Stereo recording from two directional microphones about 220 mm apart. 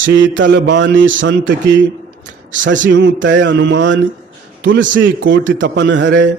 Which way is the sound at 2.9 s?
55° right (ahead or behind).